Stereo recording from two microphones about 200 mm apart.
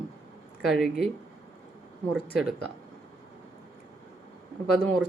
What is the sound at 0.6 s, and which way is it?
Speech, centre (ahead or behind).